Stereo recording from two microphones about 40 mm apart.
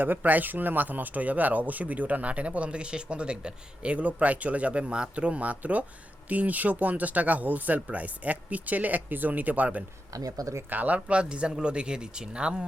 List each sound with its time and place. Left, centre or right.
0.0 s speech: right